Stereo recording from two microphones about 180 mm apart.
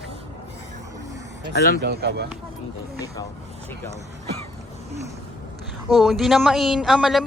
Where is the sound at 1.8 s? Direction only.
65° right (ahead or behind).